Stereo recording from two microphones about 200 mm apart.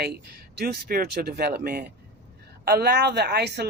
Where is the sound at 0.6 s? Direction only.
50° right (ahead or behind).